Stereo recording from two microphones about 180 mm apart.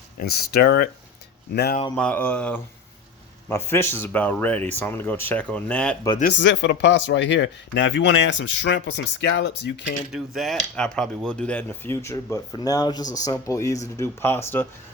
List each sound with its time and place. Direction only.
0.2 s speech: 60° left (ahead or behind)
2.0 s speech: 5° left (ahead or behind)
6.3 s speech: 85° left
10.1 s speech: centre (ahead or behind)